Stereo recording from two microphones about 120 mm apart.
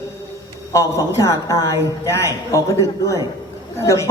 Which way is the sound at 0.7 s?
25° left (ahead or behind).